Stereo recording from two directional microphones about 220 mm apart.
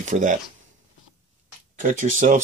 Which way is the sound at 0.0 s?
35° right (ahead or behind).